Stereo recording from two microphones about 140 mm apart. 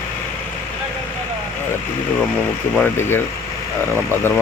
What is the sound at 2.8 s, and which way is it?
Speech, 15° left (ahead or behind).